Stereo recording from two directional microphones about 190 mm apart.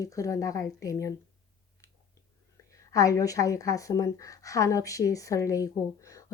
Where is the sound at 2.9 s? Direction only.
15° left (ahead or behind).